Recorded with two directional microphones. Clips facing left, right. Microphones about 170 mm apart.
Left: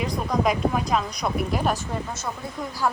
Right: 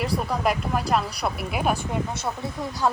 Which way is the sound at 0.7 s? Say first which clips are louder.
Right 1 dB; 5° right (ahead or behind).